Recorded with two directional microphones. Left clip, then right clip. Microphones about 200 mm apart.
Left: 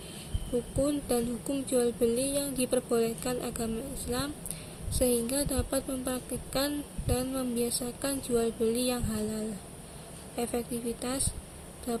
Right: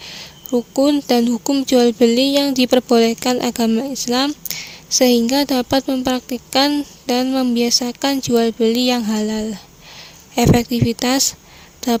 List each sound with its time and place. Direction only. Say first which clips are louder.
0.8 s a woman's voice: right 15 dB; 50° right (ahead or behind)